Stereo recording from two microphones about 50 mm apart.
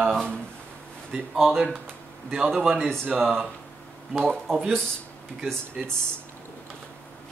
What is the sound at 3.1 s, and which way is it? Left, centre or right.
Speech, centre.